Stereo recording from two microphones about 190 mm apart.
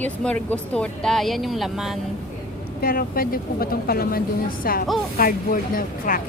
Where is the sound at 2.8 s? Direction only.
50° left (ahead or behind).